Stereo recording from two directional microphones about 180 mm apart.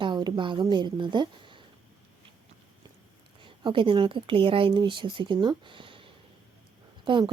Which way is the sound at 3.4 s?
30° right (ahead or behind).